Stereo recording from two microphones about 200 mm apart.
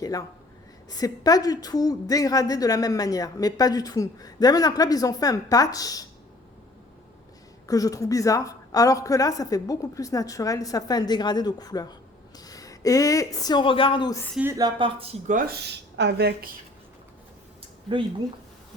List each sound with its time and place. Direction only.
0.0 s a woman's voice: 20° left (ahead or behind)
7.7 s a woman's voice: 15° left (ahead or behind)
14.3 s speech: 15° right (ahead or behind)
15.3 s speech: 40° right (ahead or behind)
16.0 s a woman's voice: 55° right (ahead or behind)